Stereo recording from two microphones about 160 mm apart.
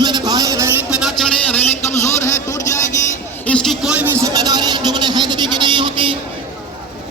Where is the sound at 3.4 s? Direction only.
5° left (ahead or behind); by 5.9 s 30° right (ahead or behind).